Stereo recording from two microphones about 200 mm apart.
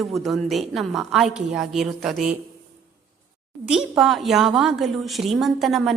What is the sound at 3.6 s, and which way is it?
A woman's voice, centre (ahead or behind).